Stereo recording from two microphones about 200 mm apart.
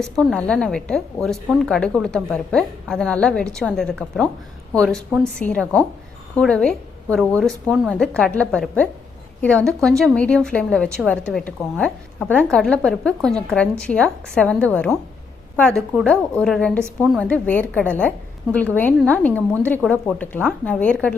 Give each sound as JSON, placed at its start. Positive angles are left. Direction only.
{"t": 0.0, "sound": "a woman's voice", "side_deg": 5}
{"t": 18.9, "sound": "a woman's voice", "side_deg": 5}